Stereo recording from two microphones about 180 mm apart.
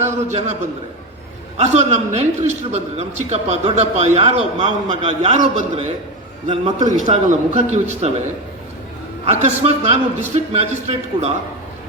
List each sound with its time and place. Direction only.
0.0 s a man's voice: 40° right (ahead or behind)
9.2 s a man's voice: 35° right (ahead or behind)